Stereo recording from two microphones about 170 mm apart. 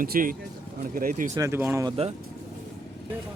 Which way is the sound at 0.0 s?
55° right (ahead or behind).